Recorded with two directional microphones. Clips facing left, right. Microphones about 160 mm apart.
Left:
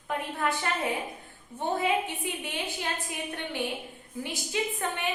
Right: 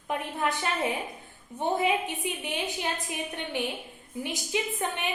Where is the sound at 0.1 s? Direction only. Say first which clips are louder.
Even; 20° right (ahead or behind).